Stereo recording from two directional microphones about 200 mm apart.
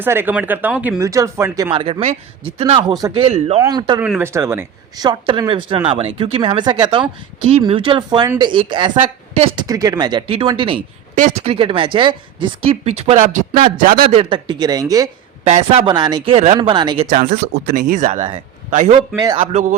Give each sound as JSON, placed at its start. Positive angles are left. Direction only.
{"t": 0.0, "sound": "speech", "side_deg": -10}
{"t": 1.7, "sound": "speech", "side_deg": -25}
{"t": 4.0, "sound": "speech", "side_deg": -10}
{"t": 9.6, "sound": "speech", "side_deg": -15}
{"t": 13.7, "sound": "a man's voice", "side_deg": -45}
{"t": 14.1, "sound": "speech", "side_deg": -25}
{"t": 15.4, "sound": "speech", "side_deg": -30}
{"t": 17.1, "sound": "speech", "side_deg": -45}
{"t": 18.9, "sound": "speech", "side_deg": -20}